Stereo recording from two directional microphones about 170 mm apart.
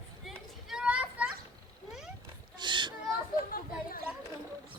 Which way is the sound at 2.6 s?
25° right (ahead or behind).